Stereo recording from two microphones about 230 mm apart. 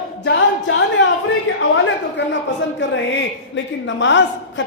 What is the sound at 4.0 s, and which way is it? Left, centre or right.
Speech, left.